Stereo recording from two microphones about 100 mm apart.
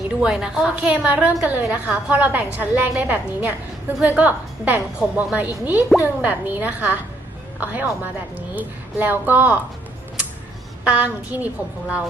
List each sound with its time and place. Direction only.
0.2 s a woman's voice: 10° right (ahead or behind)
10.8 s a woman's voice: 15° right (ahead or behind)